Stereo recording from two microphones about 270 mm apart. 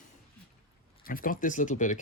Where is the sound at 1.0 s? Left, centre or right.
Left.